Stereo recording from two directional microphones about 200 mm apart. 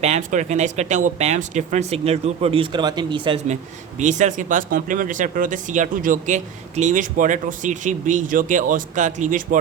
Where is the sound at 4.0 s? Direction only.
35° right (ahead or behind).